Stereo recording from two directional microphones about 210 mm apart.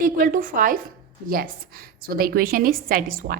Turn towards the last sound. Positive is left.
turn(degrees=-40)  # may be behind; listen again after turning